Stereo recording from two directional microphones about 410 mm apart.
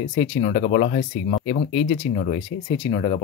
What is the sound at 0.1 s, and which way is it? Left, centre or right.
Speech, centre.